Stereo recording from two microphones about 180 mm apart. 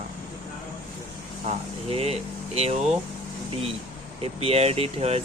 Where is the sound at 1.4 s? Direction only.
35° right (ahead or behind).